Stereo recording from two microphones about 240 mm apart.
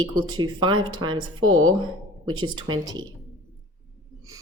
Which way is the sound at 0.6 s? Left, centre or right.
Centre.